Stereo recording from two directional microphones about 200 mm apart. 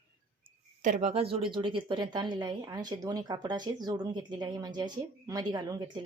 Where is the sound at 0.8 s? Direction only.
35° right (ahead or behind).